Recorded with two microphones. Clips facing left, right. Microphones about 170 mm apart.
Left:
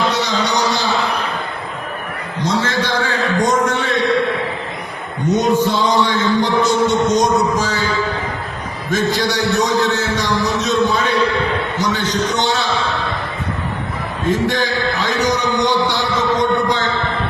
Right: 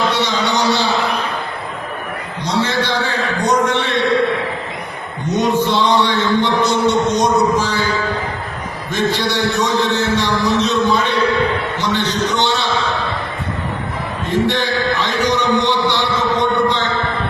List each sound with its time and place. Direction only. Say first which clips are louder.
0.1 s a sound: right 1 dB; 40° left (ahead or behind)
2.4 s a sound: even; 45° left (ahead or behind)
5.3 s music: left 1 dB; 45° left (ahead or behind)
6.8 s speech: even; 45° left (ahead or behind)
8.9 s speech: left 1 dB; 45° left (ahead or behind)
9.4 s a man's voice: left 1 dB; centre (ahead or behind)
9.6 s speech: even; 40° left (ahead or behind)
14.3 s speech: even; 45° left (ahead or behind)